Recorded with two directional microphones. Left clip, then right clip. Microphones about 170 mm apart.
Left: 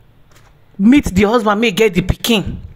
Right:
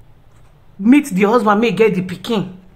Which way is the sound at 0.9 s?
35° left (ahead or behind).